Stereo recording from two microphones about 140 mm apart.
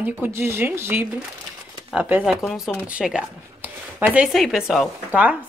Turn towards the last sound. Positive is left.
turn(degrees=-5)  # may be behind; listen again after turning